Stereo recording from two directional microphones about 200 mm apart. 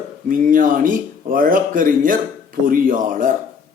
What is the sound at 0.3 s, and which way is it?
A man's voice, 45° right (ahead or behind).